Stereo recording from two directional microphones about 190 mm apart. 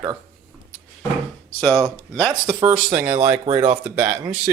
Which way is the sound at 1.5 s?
20° right (ahead or behind).